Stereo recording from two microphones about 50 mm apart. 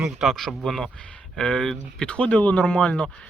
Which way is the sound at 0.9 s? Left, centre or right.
Centre.